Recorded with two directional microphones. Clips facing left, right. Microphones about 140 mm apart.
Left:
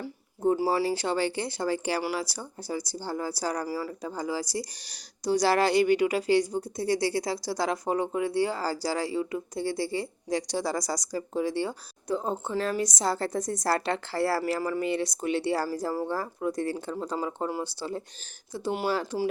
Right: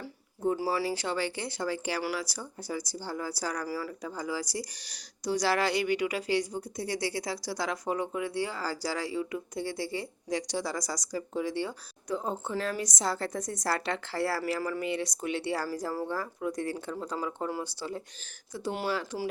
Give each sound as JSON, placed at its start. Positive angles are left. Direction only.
{"t": 0.7, "sound": "speech", "side_deg": 40}